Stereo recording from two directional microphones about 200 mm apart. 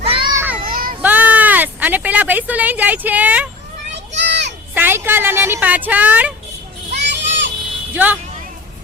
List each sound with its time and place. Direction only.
0.0 s children playing: 25° right (ahead or behind)
0.3 s children playing: 10° right (ahead or behind)
0.6 s a sound: 45° right (ahead or behind)
1.0 s speech: 5° right (ahead or behind)
3.9 s a sound: 60° right (ahead or behind)
4.7 s a woman's voice: 10° right (ahead or behind)
6.9 s children playing: 60° right (ahead or behind)
7.9 s a woman's voice: 10° right (ahead or behind)